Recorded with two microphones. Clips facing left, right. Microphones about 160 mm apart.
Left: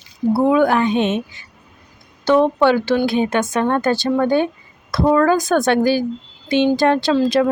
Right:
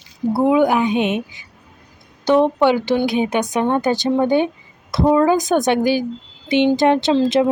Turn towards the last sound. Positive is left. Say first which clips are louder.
# even
turn(degrees=-25)  # may be behind; listen again after turning